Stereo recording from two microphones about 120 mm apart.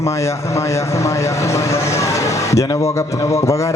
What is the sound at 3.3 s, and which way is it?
Speech, 25° left (ahead or behind).